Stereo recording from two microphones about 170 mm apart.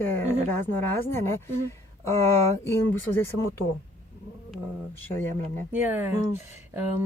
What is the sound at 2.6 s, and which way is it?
Speech, 15° left (ahead or behind).